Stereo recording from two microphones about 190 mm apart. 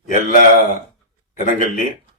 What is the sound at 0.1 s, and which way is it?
Speech, 45° left (ahead or behind).